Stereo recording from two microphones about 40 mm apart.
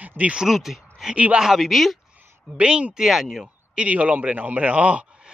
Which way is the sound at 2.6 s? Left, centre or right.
Right.